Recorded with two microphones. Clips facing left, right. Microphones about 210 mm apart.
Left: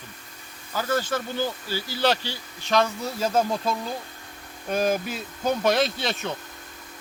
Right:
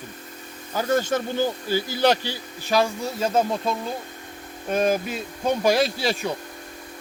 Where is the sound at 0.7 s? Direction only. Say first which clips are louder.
Right 4 dB; 20° right (ahead or behind).